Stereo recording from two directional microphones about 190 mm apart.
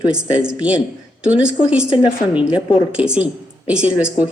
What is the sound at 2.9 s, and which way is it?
A woman's voice, 5° right (ahead or behind).